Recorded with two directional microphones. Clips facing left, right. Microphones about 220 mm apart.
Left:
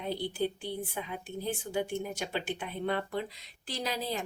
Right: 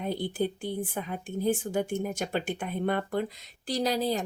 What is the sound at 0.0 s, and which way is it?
A woman's voice, 50° right (ahead or behind).